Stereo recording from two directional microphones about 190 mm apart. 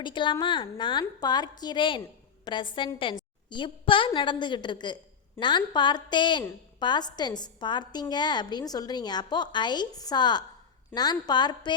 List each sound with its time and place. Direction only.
0.0 s a woman's voice: 25° left (ahead or behind)